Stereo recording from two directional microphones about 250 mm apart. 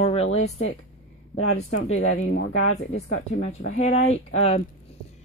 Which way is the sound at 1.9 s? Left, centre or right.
Left.